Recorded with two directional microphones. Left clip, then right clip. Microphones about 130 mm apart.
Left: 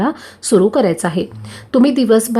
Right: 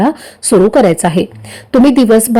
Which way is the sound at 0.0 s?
20° right (ahead or behind).